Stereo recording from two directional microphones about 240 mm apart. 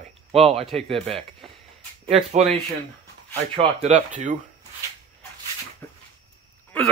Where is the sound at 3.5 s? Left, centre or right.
Right.